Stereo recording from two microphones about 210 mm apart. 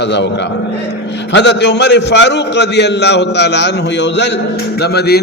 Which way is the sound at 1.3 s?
55° left (ahead or behind).